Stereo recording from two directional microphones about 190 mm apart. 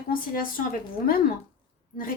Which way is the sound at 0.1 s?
45° left (ahead or behind).